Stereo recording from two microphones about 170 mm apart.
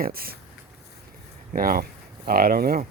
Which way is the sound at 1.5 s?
60° right (ahead or behind).